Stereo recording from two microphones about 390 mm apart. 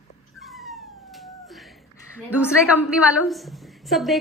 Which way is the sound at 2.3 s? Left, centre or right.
Centre.